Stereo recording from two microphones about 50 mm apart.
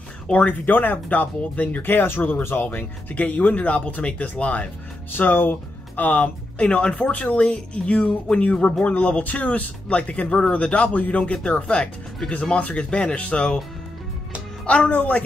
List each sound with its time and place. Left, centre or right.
0.3 s speech: left
0.7 s speech: left
1.8 s speech: left
5.1 s speech: left
14.7 s speech: left